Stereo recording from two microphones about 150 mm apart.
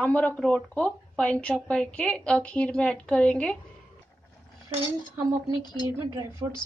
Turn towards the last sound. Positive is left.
turn(degrees=-20)  # may be behind; listen again after turning